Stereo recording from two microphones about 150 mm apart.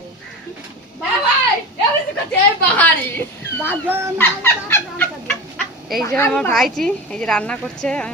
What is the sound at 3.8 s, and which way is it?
Speech, 15° right (ahead or behind).